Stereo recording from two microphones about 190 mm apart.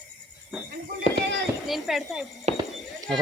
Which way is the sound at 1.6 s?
Centre (ahead or behind).